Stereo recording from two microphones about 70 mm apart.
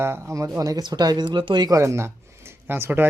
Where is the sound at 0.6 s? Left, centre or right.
Right.